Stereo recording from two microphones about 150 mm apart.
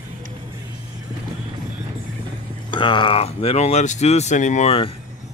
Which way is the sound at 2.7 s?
30° left (ahead or behind).